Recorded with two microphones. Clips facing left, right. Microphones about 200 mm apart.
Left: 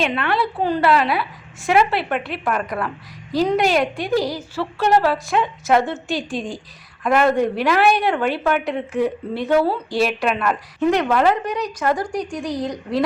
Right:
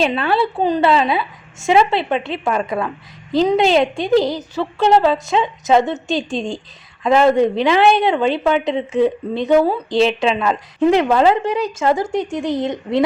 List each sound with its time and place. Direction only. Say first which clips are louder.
0.0 s a woman's voice: right 4 dB; 30° right (ahead or behind)